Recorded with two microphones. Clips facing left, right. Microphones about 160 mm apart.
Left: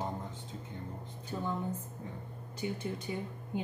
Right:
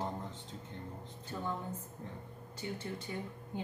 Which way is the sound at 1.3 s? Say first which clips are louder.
Left 3 dB; 10° left (ahead or behind).